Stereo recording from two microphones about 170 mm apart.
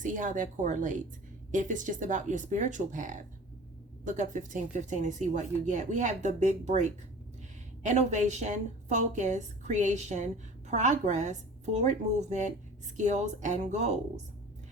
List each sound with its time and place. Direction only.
0.0 s a woman's voice: 50° right (ahead or behind)